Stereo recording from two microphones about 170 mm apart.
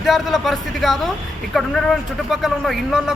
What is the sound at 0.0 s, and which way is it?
Speech, centre (ahead or behind).